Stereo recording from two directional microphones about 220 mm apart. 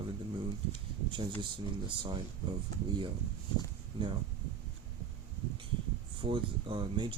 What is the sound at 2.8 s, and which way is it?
Speech, 20° right (ahead or behind).